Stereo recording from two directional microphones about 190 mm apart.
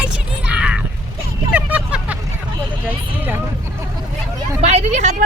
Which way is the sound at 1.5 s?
5° right (ahead or behind).